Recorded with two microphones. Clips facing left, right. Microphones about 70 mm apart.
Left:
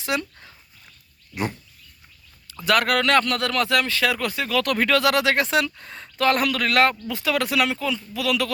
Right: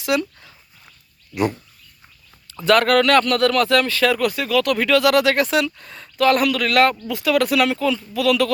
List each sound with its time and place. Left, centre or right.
0.0 s dog: left
2.6 s speech: centre; by 5.1 s left
5.1 s speech: left
7.3 s speech: centre